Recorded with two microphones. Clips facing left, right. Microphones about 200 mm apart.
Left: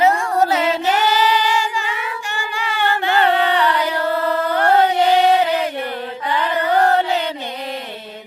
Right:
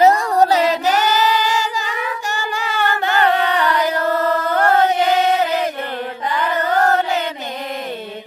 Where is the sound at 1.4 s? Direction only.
40° right (ahead or behind).